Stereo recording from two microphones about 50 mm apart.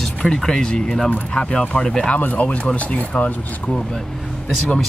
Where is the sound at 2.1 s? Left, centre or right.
Left.